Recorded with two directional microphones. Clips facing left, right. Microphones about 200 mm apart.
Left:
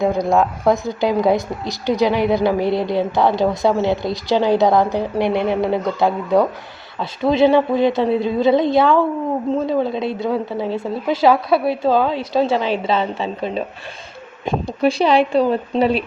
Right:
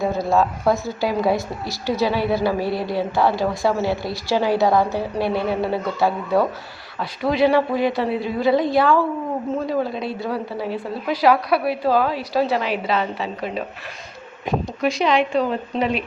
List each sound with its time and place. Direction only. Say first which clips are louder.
0.0 s a woman's voice: left 3 dB; 15° left (ahead or behind); by 16.0 s 35° left (ahead or behind)